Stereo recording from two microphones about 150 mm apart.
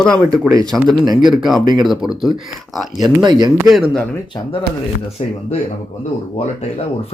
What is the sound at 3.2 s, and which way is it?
Speech, 30° right (ahead or behind).